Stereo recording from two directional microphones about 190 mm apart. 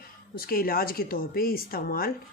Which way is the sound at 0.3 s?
50° left (ahead or behind).